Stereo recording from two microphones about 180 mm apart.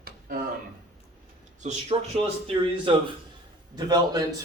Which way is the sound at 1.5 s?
40° right (ahead or behind).